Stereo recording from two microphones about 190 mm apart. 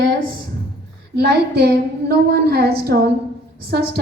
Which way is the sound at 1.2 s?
55° right (ahead or behind).